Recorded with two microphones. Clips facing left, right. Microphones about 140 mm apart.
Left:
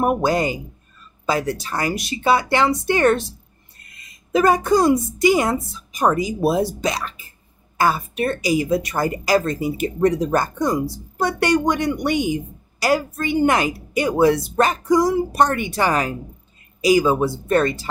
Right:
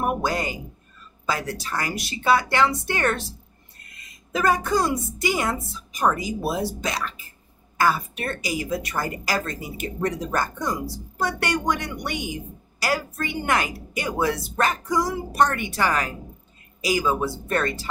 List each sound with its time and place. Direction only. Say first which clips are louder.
0.0 s a woman's voice: left 6 dB; 20° left (ahead or behind)
4.3 s a woman's voice: left 6 dB; 20° left (ahead or behind)